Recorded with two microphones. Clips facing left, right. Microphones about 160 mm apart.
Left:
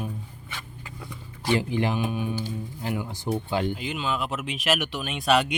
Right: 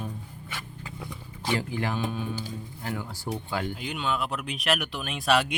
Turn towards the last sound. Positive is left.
turn(degrees=0)  # may be behind; listen again after turning